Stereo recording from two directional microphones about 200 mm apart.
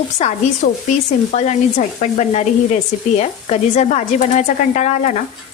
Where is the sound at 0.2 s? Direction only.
35° left (ahead or behind).